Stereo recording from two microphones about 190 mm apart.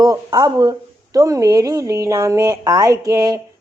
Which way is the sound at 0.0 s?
20° right (ahead or behind).